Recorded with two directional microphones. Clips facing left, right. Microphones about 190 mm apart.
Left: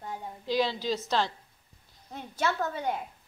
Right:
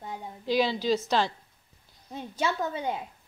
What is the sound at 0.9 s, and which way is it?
Speech, 5° right (ahead or behind).